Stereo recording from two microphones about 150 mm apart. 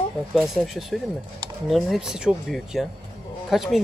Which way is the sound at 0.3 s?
Centre (ahead or behind).